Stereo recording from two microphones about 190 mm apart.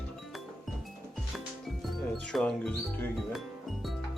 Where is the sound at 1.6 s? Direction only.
Centre (ahead or behind).